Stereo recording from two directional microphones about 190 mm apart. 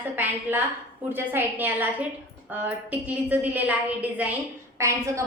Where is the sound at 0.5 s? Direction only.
10° right (ahead or behind).